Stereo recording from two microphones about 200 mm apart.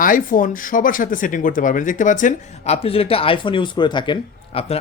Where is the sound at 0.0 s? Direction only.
40° left (ahead or behind).